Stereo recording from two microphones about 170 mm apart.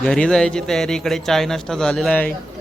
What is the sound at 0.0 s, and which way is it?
Speech, 5° left (ahead or behind).